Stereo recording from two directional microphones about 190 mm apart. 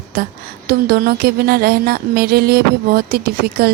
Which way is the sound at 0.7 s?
55° right (ahead or behind).